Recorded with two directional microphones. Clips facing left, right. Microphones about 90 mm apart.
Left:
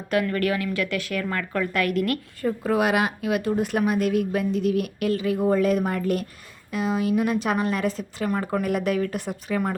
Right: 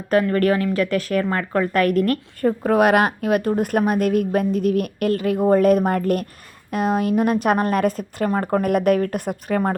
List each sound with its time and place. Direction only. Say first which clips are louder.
0.1 s a woman's voice: right 6 dB; 40° right (ahead or behind)